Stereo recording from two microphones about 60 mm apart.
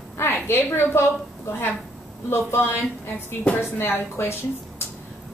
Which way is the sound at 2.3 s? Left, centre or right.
Left.